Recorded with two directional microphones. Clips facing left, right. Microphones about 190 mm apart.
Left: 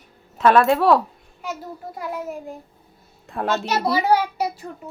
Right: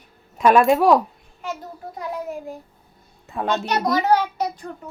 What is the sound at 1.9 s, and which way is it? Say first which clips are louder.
A child's voice: right 1 dB; 5° left (ahead or behind).